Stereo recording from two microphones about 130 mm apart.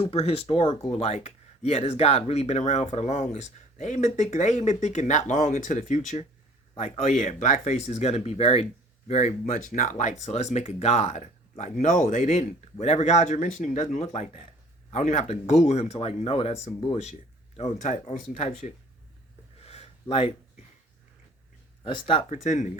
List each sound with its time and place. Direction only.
0.0 s speech: 50° left (ahead or behind); by 6.2 s 65° left (ahead or behind)
6.7 s speech: 55° left (ahead or behind)
17.6 s speech: 70° left (ahead or behind)
18.0 s speech: 60° left (ahead or behind)
19.6 s a sound: 55° left (ahead or behind)
21.8 s speech: 40° left (ahead or behind)
22.3 s speech: 65° left (ahead or behind)